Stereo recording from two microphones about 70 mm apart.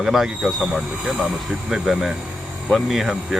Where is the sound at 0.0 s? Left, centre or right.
Centre.